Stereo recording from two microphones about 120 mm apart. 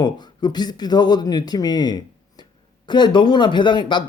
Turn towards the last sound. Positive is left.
turn(degrees=40)  # may be behind; listen again after turning